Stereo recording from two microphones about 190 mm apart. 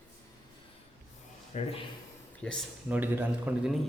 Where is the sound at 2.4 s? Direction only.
5° left (ahead or behind).